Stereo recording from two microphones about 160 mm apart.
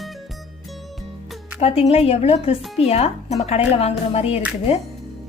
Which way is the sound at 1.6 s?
40° left (ahead or behind).